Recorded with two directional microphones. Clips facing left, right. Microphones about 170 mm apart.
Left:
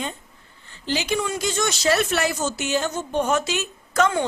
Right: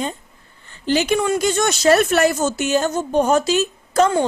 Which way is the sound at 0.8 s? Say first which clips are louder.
Right 7 dB; 50° right (ahead or behind).